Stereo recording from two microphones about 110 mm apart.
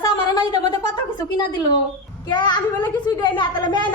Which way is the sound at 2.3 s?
45° left (ahead or behind).